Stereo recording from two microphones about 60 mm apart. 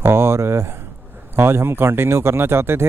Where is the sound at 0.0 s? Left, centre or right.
Right.